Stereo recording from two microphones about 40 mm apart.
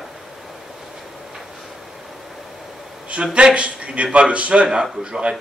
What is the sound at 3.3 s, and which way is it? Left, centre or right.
A man's voice, right.